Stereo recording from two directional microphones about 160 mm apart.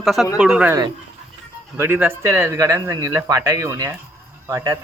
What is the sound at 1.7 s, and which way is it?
Speech, 15° right (ahead or behind).